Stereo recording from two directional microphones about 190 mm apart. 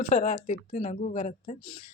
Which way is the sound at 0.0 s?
40° left (ahead or behind).